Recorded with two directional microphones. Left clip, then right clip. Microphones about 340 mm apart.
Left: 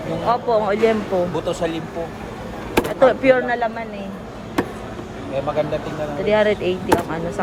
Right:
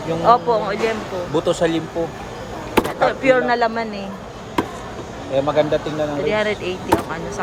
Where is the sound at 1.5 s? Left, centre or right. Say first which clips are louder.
Right 4 dB; right.